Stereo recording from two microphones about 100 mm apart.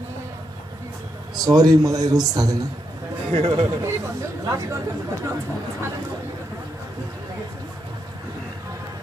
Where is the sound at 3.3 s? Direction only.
90° right.